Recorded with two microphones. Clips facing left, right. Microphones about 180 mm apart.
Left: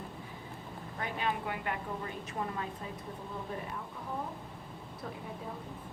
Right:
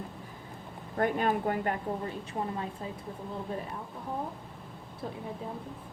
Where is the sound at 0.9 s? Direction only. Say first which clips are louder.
Right 8 dB; 50° right (ahead or behind).